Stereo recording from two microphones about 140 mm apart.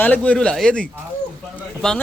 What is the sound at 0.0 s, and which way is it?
A man's voice, 10° left (ahead or behind).